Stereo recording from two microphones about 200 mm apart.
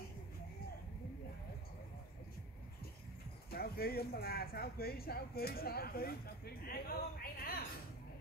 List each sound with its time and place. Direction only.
3.4 s speech: 50° left (ahead or behind)